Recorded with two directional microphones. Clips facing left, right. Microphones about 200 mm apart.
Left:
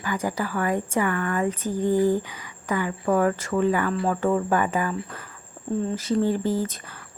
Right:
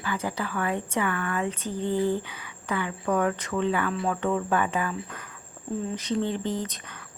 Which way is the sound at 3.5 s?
45° left (ahead or behind).